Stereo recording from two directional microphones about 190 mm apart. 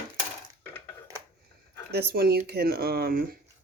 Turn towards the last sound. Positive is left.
turn(degrees=-55)  # may be behind; listen again after turning